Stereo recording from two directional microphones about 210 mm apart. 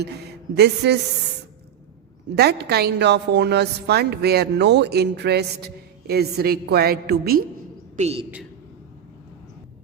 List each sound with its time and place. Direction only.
0.5 s a woman's voice: 50° right (ahead or behind)
2.3 s a woman's voice: 50° right (ahead or behind)
7.9 s a woman's voice: 30° right (ahead or behind)